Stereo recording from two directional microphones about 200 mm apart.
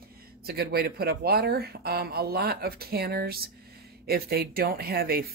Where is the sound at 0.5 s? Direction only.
50° right (ahead or behind).